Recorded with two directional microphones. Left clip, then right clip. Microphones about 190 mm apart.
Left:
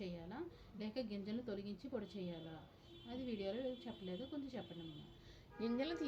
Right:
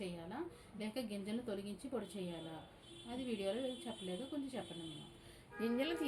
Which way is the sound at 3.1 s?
30° right (ahead or behind).